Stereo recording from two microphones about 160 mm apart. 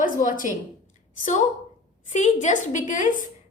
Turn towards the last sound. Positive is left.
turn(degrees=55)  # may be behind; listen again after turning